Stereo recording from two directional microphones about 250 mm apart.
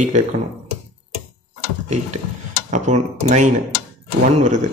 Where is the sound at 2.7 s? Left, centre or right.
Right.